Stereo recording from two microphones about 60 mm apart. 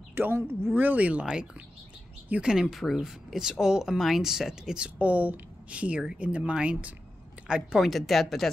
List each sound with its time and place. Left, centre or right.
0.1 s speech: right
1.2 s speech: centre
2.7 s speech: centre
4.8 s speech: right
7.8 s speech: centre